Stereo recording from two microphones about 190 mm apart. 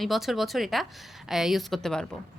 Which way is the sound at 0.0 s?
Centre (ahead or behind).